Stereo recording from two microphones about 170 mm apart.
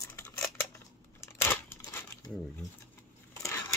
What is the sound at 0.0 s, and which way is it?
Scissors, 15° left (ahead or behind).